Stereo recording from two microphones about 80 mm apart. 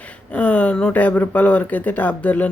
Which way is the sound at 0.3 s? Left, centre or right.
Centre.